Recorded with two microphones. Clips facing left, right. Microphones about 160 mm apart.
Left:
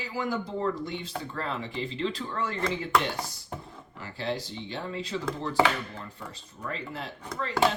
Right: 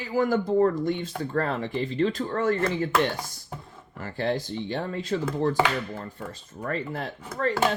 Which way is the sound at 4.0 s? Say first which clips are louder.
Right 5 dB; 50° right (ahead or behind).